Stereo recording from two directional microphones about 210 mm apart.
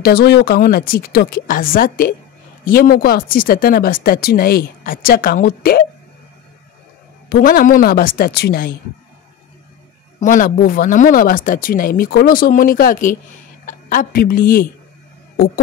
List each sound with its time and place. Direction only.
0.0 s speech: 50° left (ahead or behind)
7.2 s speech: 45° left (ahead or behind)
10.2 s a woman's voice: 40° left (ahead or behind)